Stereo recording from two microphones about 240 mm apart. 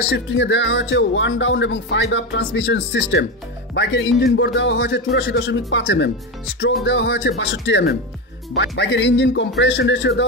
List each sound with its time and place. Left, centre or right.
0.1 s speech: left